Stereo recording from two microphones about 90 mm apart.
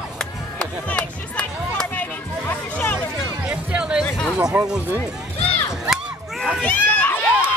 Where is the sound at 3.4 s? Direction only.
10° right (ahead or behind).